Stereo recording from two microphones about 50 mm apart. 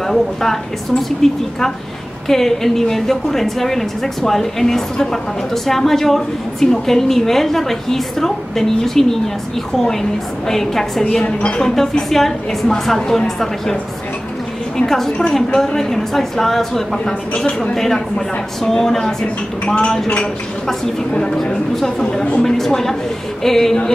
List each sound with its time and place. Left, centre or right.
0.0 s a woman's voice: centre
10.5 s a woman's voice: centre
11.2 s speech: left
11.6 s a woman's voice: centre
14.9 s a woman's voice: centre
19.6 s speech: left
21.1 s a woman's voice: centre